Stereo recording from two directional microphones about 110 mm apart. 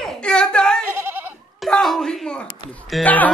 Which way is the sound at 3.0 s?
15° left (ahead or behind).